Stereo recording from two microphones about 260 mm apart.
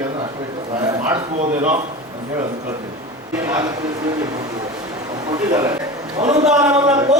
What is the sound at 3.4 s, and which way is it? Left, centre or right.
Speech, centre.